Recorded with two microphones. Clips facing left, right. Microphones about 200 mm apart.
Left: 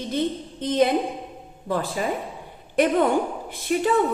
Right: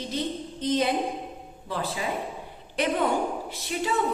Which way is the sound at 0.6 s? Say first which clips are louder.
Left 5 dB; 55° left (ahead or behind).